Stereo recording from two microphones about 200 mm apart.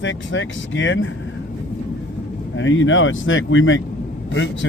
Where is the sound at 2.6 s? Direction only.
70° left (ahead or behind).